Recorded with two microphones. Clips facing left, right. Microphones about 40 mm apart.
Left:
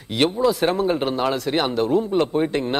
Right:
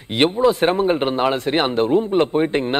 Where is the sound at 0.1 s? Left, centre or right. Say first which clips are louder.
Right 3 dB; right.